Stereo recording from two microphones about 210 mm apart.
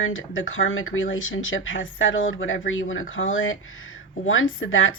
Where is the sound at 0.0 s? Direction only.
70° left (ahead or behind).